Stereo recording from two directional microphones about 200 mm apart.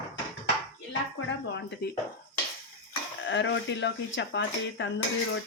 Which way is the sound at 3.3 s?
65° left (ahead or behind).